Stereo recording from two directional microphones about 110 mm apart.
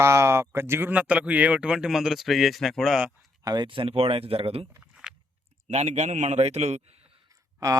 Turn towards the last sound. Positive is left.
turn(degrees=-30)  # may be behind; listen again after turning